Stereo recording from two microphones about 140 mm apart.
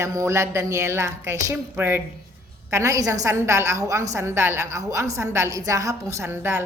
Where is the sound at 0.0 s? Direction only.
20° right (ahead or behind).